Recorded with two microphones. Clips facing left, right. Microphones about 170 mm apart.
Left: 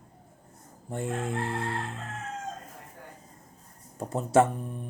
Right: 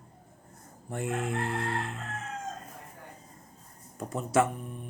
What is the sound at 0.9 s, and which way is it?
Speech, 30° left (ahead or behind).